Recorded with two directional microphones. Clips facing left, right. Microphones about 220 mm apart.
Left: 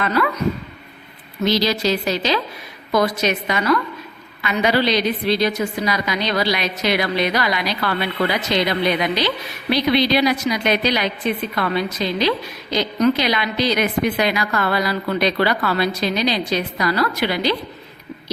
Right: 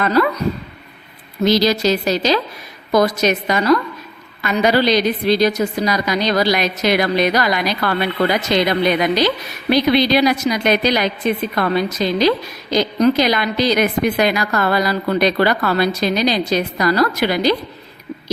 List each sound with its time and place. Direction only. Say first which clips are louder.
0.0 s a woman's voice: right 5 dB; 40° right (ahead or behind)
1.5 s a woman's voice: right 4 dB; 45° right (ahead or behind)